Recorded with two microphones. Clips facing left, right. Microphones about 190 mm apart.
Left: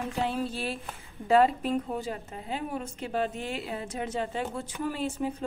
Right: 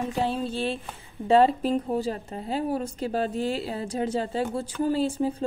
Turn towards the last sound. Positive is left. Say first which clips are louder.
# right 6 dB
turn(degrees=-30)  # may be behind; listen again after turning